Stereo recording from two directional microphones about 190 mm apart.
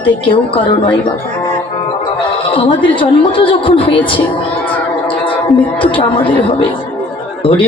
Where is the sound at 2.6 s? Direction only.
25° left (ahead or behind).